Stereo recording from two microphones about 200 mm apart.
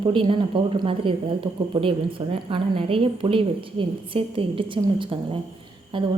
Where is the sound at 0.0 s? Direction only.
25° right (ahead or behind).